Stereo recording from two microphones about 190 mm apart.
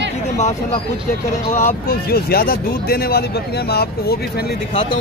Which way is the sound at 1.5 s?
45° left (ahead or behind).